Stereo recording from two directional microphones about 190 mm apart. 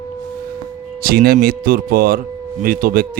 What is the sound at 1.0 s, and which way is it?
Speech, 55° right (ahead or behind).